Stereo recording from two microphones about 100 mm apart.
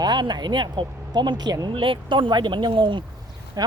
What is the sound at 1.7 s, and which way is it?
Speech, 60° right (ahead or behind).